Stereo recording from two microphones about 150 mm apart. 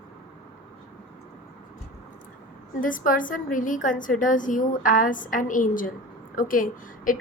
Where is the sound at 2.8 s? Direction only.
65° left (ahead or behind).